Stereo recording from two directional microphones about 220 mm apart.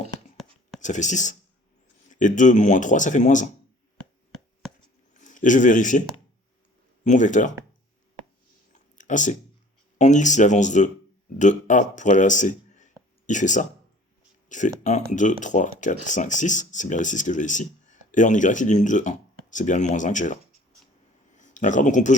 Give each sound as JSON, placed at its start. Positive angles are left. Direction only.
{"t": 0.8, "sound": "speech", "side_deg": 35}
{"t": 5.1, "sound": "speech", "side_deg": 35}
{"t": 7.0, "sound": "speech", "side_deg": 35}
{"t": 9.0, "sound": "speech", "side_deg": 35}
{"t": 21.3, "sound": "a sound", "side_deg": 35}